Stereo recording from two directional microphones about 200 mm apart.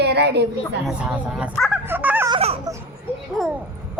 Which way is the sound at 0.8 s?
5° right (ahead or behind).